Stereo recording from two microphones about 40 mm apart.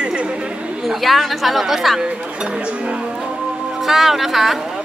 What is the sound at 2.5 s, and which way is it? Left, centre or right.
Speech, right.